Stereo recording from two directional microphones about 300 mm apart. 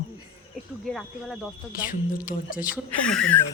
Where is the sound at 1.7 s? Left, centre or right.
Left.